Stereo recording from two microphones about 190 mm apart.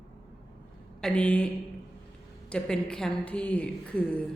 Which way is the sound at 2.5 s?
5° left (ahead or behind).